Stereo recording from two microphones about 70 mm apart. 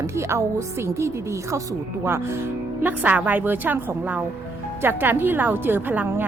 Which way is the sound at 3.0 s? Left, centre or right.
Right.